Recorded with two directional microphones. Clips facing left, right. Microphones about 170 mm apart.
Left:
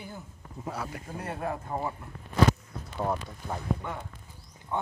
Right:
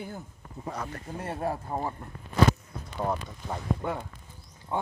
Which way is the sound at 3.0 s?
5° left (ahead or behind).